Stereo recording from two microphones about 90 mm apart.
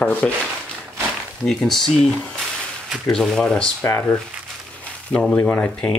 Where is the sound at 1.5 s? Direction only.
Centre (ahead or behind).